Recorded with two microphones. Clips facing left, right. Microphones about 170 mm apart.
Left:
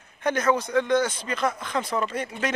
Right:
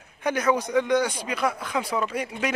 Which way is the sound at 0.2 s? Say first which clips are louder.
Even; 10° right (ahead or behind).